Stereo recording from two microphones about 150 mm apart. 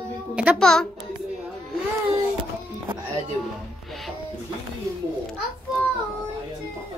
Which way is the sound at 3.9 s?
Centre (ahead or behind).